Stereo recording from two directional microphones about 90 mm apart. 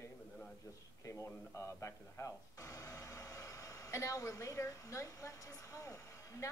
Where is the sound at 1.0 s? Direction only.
35° left (ahead or behind).